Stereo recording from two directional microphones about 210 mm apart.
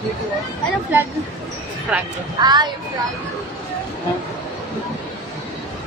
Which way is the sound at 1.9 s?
5° right (ahead or behind).